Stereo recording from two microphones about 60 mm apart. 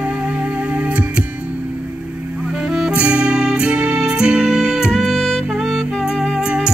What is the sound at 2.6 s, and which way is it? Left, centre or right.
Music, centre.